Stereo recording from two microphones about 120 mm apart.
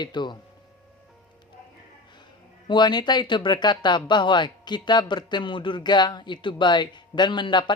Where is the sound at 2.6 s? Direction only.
40° left (ahead or behind).